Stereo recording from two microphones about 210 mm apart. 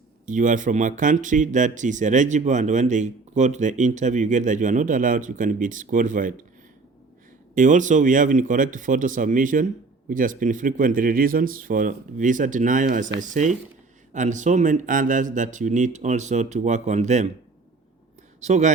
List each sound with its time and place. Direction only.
0.3 s speech: 40° right (ahead or behind)
7.5 s speech: 35° right (ahead or behind)
18.3 s speech: 35° right (ahead or behind)